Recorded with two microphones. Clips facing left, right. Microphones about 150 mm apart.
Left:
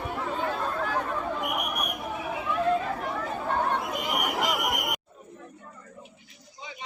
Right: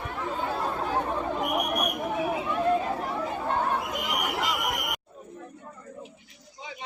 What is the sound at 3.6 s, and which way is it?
Chatter, 5° right (ahead or behind).